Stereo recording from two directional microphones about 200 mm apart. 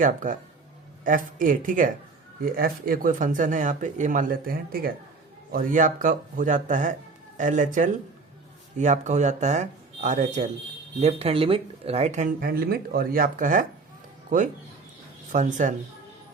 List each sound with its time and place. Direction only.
0.0 s speech: 40° right (ahead or behind)